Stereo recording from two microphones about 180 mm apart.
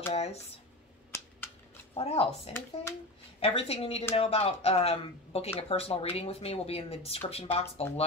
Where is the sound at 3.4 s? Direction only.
35° left (ahead or behind).